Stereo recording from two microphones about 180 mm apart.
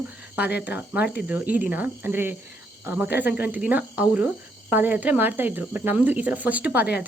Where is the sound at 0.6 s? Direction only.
10° right (ahead or behind).